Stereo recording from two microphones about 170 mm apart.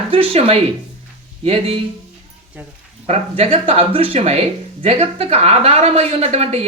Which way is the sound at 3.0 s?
35° right (ahead or behind).